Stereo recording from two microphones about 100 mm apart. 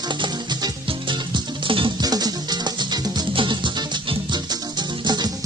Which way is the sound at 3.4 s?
55° right (ahead or behind).